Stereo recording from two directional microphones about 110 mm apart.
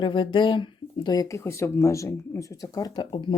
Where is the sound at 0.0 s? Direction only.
50° left (ahead or behind).